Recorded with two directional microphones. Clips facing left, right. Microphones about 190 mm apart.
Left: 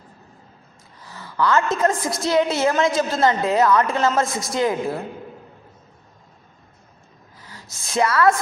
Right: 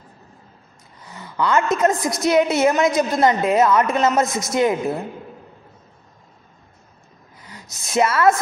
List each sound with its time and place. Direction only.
1.0 s a sound: 20° right (ahead or behind)
2.0 s a woman's voice: 20° right (ahead or behind)
7.4 s a woman's voice: 20° right (ahead or behind)